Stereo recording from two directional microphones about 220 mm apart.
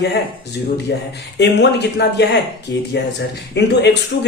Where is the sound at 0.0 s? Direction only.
50° left (ahead or behind).